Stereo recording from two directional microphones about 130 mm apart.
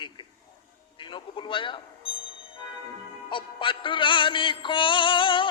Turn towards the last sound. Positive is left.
turn(degrees=40)  # may be behind; listen again after turning